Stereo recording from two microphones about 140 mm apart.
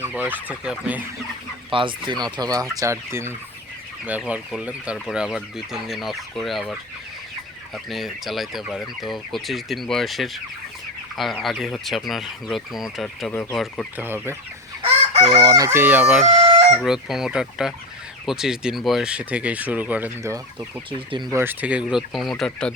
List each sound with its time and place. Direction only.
0.3 s speech: 10° right (ahead or behind)
1.7 s speech: 35° right (ahead or behind); by 3.3 s 20° right (ahead or behind)
4.2 s speech: 5° right (ahead or behind)
4.9 s fowl: 5° right (ahead or behind)
7.9 s fowl: centre (ahead or behind)
13.3 s speech: 15° left (ahead or behind)
13.9 s speech: 15° right (ahead or behind)
15.3 s speech: 30° right (ahead or behind); by 16.2 s 10° right (ahead or behind)
16.2 s chicken: 45° right (ahead or behind)
16.8 s fowl: 5° right (ahead or behind)
18.3 s speech: 5° right (ahead or behind)
21.1 s speech: 35° right (ahead or behind)
21.3 s fowl: 15° right (ahead or behind); by 22.7 s 5° left (ahead or behind)